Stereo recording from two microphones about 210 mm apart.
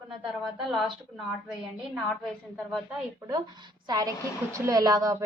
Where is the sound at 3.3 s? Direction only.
20° right (ahead or behind).